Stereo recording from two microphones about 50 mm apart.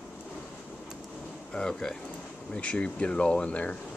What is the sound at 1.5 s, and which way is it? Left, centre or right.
Speech, centre.